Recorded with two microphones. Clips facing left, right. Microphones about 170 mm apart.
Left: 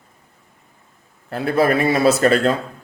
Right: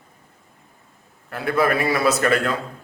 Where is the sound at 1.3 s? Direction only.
30° left (ahead or behind).